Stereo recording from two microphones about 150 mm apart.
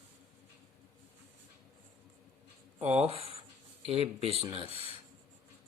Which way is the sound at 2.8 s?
45° right (ahead or behind).